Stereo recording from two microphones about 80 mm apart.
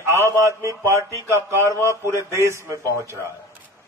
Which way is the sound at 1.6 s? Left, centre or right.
Left.